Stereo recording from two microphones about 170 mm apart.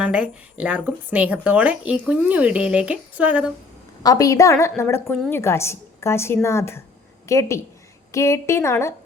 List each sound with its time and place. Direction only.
0.0 s speech: 5° right (ahead or behind)
4.0 s a woman's voice: 20° left (ahead or behind)